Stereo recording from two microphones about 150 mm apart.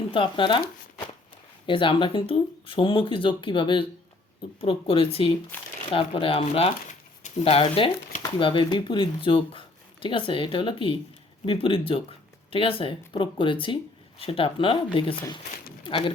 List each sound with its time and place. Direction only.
0.1 s speech: 35° left (ahead or behind)
1.6 s speech: 35° left (ahead or behind)
5.5 s speech: 15° left (ahead or behind)
5.9 s speech: 35° left (ahead or behind)